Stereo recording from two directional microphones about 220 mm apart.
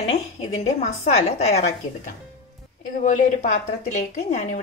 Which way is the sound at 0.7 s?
30° left (ahead or behind).